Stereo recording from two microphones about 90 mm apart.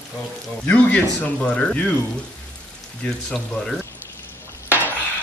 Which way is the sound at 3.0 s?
10° left (ahead or behind).